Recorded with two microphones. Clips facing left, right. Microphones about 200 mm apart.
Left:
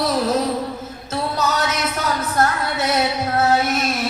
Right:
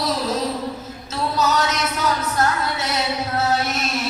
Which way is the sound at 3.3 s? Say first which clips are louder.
Left 4 dB; 50° left (ahead or behind).